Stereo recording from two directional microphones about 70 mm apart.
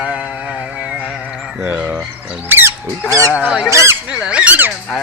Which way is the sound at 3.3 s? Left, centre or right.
Centre.